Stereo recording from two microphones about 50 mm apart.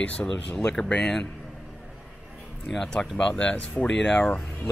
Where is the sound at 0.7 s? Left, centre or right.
Centre.